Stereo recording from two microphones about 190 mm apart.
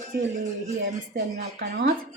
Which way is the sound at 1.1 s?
60° right (ahead or behind).